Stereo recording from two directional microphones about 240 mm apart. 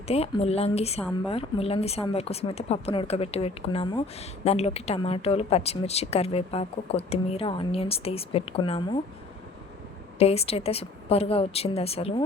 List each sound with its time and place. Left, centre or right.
0.1 s speech: left
10.2 s speech: left